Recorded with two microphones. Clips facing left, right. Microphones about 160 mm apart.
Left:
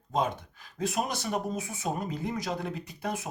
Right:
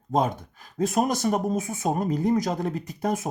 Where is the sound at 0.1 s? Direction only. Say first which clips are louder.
Right 5 dB; 45° right (ahead or behind).